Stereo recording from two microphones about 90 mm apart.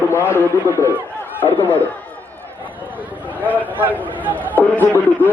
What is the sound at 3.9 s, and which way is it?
A man's voice, 20° left (ahead or behind).